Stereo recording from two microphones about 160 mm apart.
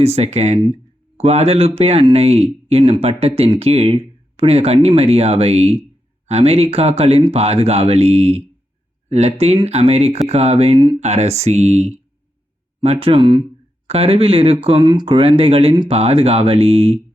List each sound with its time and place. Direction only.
0.0 s speech: 40° right (ahead or behind)